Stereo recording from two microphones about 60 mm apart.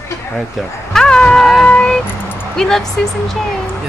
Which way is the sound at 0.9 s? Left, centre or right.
Centre.